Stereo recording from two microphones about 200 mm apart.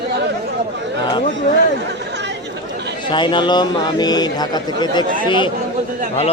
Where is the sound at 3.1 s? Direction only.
25° left (ahead or behind).